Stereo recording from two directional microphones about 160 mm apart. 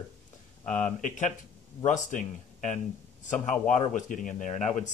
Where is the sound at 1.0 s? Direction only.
50° left (ahead or behind).